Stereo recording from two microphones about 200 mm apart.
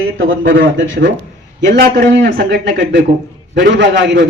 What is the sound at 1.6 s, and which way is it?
A man's voice, 60° right (ahead or behind).